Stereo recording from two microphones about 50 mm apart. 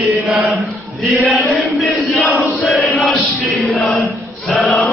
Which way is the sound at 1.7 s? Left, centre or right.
Centre.